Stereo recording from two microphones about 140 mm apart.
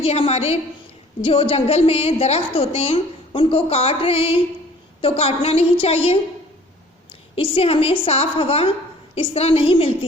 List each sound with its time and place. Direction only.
0.0 s a woman's voice: 45° left (ahead or behind)
7.3 s a woman's voice: 40° left (ahead or behind)